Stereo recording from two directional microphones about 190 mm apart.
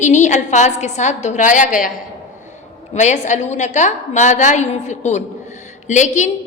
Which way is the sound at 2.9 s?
40° left (ahead or behind).